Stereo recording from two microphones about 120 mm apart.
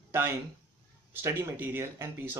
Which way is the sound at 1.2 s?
15° right (ahead or behind).